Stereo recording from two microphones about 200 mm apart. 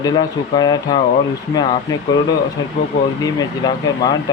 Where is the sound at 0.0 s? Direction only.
20° left (ahead or behind).